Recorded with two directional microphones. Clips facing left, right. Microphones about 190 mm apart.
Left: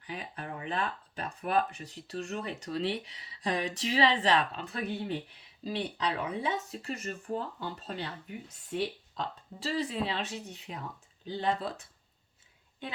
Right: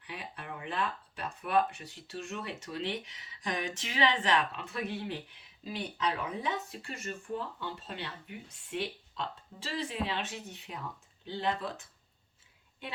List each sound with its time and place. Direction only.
0.1 s speech: 35° left (ahead or behind)